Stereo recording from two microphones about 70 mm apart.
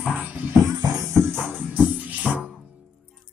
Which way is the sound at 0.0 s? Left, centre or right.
Centre.